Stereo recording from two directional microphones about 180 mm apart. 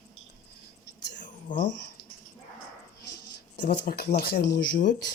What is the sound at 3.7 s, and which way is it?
Speech, 65° left (ahead or behind).